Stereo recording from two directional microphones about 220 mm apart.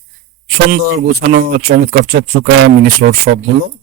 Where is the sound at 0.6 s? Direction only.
45° right (ahead or behind).